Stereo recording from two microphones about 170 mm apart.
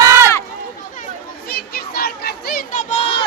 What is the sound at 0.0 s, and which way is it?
Run, 15° right (ahead or behind).